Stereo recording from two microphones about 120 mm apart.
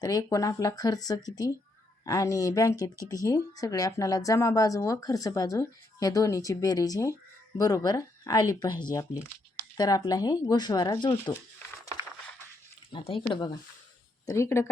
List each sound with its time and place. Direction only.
0.0 s speech: 30° left (ahead or behind)
12.9 s speech: 45° left (ahead or behind)
14.3 s speech: 25° left (ahead or behind)